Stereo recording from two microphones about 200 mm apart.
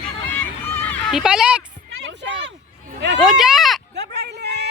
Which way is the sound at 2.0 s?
60° right (ahead or behind).